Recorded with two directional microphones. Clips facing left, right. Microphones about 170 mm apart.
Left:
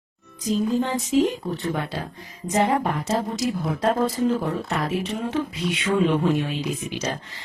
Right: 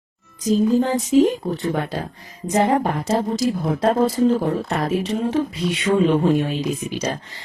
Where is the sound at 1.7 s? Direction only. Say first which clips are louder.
Right 4 dB; 45° right (ahead or behind).